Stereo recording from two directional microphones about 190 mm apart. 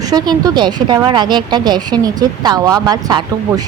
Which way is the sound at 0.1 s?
20° right (ahead or behind).